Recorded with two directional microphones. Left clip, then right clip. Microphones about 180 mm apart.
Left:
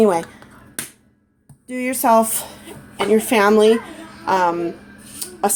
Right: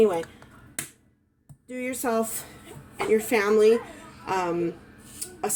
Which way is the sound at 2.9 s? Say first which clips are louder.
Left 7 dB; 20° left (ahead or behind).